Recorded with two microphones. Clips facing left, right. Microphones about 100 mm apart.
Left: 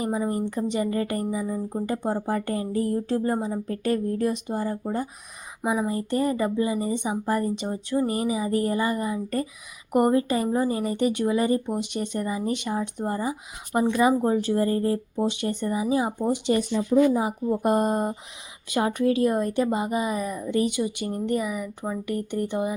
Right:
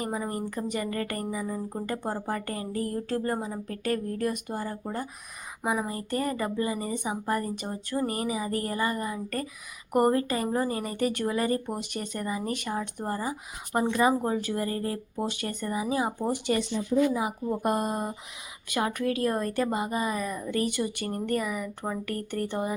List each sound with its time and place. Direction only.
0.0 s a woman's voice: 20° left (ahead or behind)
13.7 s speech: 10° left (ahead or behind)
14.3 s a woman's voice: 30° left (ahead or behind)
17.8 s speech: 35° left (ahead or behind)
18.7 s a woman's voice: 25° left (ahead or behind)